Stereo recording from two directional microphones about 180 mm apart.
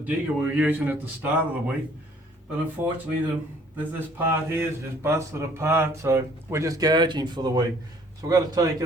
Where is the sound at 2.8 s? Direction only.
15° right (ahead or behind).